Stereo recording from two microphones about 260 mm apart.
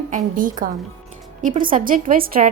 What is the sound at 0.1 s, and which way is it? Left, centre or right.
A woman's voice, right.